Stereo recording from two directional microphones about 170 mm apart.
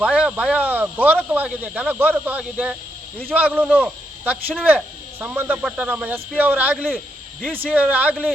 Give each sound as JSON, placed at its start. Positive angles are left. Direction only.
{"t": 0.0, "sound": "speech", "side_deg": -5}